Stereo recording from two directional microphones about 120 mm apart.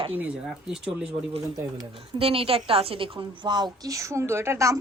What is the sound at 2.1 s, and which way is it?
A woman's voice, 50° right (ahead or behind).